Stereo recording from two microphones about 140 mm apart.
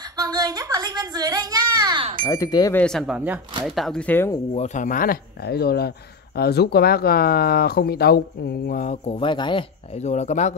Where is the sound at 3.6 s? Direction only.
Centre (ahead or behind).